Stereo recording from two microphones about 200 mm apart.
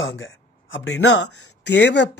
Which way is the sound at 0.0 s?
70° left (ahead or behind).